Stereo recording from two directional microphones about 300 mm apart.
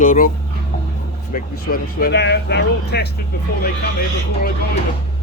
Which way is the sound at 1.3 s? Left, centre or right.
Left.